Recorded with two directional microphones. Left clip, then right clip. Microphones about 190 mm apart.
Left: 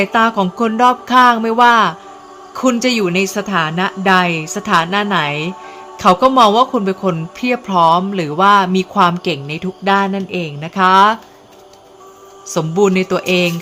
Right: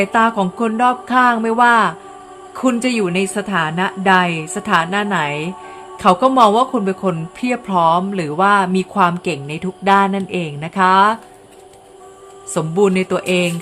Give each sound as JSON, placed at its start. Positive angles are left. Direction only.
{"t": 0.0, "sound": "speech", "side_deg": 5}
{"t": 12.5, "sound": "speech", "side_deg": 5}